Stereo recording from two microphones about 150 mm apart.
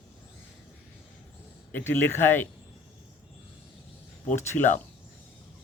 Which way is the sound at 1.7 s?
15° left (ahead or behind).